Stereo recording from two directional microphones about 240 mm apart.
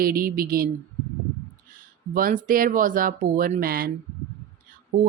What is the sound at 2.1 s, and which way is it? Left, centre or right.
Speech, right.